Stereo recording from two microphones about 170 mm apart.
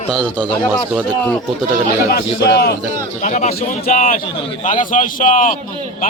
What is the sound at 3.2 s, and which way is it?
A man's voice, 45° left (ahead or behind).